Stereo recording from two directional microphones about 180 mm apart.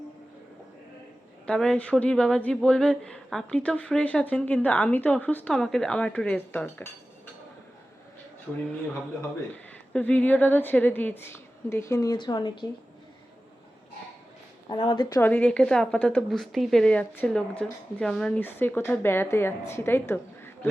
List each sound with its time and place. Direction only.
1.5 s speech: 5° left (ahead or behind)
9.9 s a woman's voice: 10° left (ahead or behind); by 12.6 s 25° left (ahead or behind)
14.7 s a woman's voice: 25° left (ahead or behind)
15.2 s a woman's voice: 5° left (ahead or behind)